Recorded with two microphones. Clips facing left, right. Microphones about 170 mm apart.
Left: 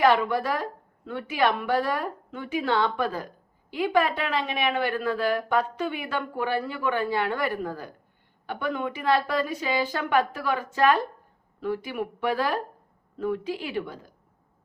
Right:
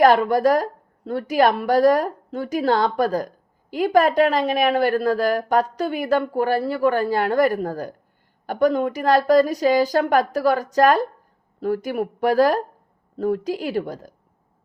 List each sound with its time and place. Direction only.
0.0 s a woman's voice: 45° right (ahead or behind)